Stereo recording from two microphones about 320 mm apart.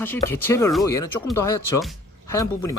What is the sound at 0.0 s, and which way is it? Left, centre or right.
Speech, centre.